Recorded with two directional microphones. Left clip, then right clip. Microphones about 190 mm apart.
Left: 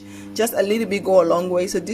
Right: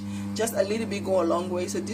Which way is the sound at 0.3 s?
45° left (ahead or behind).